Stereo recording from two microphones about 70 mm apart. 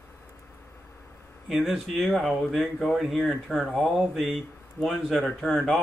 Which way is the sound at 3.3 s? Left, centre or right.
Centre.